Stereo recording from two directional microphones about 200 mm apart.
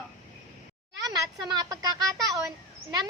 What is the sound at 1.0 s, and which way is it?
A woman's voice, 20° right (ahead or behind).